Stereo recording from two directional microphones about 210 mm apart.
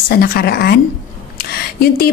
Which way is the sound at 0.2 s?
50° left (ahead or behind).